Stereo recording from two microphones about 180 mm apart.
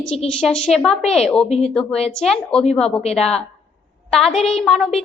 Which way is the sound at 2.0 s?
5° left (ahead or behind).